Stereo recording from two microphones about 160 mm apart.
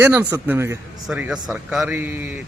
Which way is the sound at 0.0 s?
15° right (ahead or behind).